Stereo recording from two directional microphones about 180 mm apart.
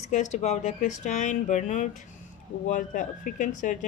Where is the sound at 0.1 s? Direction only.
40° left (ahead or behind).